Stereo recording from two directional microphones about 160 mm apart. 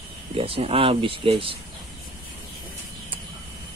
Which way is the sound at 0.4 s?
35° right (ahead or behind).